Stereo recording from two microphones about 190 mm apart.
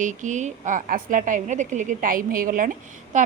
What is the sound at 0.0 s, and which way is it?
A woman's voice, 40° right (ahead or behind).